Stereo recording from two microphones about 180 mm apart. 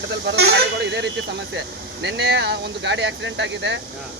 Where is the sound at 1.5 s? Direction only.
85° right.